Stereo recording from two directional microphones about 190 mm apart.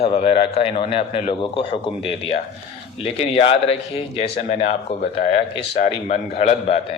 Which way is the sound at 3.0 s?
30° left (ahead or behind).